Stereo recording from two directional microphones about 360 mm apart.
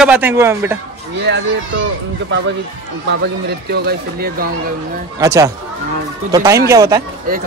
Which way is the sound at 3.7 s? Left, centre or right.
Right.